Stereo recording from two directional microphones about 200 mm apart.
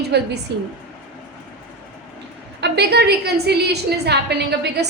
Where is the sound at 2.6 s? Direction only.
55° right (ahead or behind).